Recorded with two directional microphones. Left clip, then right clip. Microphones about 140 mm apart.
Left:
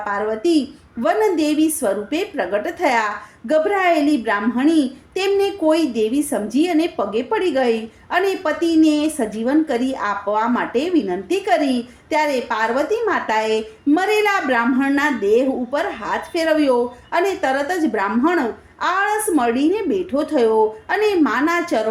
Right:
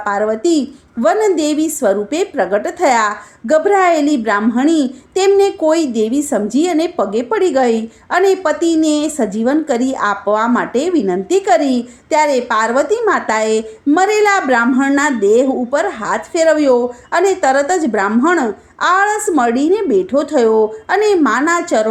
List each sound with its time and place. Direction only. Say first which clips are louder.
0.0 s a woman's voice: right 5 dB; 45° right (ahead or behind)